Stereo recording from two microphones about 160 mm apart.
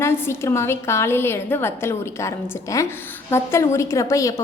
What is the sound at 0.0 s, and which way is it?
A woman's voice, 15° left (ahead or behind).